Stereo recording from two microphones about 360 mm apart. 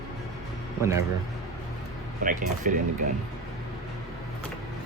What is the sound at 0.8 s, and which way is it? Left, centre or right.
Speech, centre.